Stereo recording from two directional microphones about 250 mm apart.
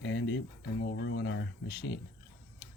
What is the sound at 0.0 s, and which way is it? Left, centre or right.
Speech, left.